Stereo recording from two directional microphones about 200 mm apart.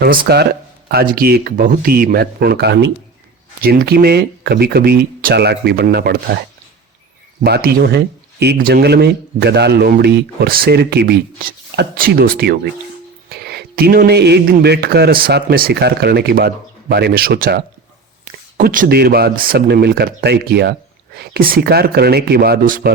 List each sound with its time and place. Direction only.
0.3 s speech: 55° right (ahead or behind)
7.4 s speech: 50° right (ahead or behind)